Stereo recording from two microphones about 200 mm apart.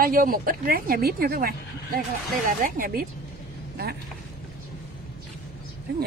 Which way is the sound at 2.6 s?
45° right (ahead or behind).